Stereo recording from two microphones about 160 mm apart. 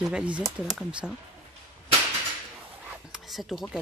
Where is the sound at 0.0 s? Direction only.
5° right (ahead or behind).